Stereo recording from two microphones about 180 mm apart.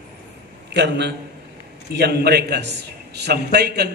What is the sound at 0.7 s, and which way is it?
A man's voice, 75° right (ahead or behind).